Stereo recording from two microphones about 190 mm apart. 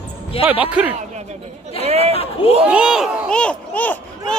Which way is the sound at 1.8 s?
35° right (ahead or behind).